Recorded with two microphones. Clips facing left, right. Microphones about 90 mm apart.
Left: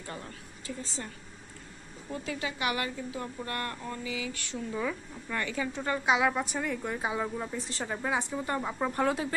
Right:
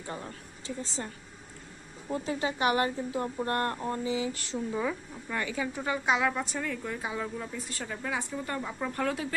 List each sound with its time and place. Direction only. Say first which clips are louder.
0.0 s a woman's voice: right 2 dB; 25° right (ahead or behind)
4.7 s a woman's voice: right 2 dB; 15° right (ahead or behind); by 9.3 s 25° left (ahead or behind)